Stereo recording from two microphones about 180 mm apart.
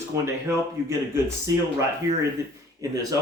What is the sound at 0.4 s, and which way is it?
Speech, 15° right (ahead or behind).